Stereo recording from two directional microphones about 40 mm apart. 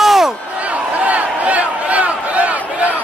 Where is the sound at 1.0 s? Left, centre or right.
Right.